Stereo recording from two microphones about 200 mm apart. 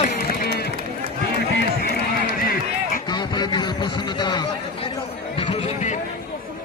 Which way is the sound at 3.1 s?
20° left (ahead or behind).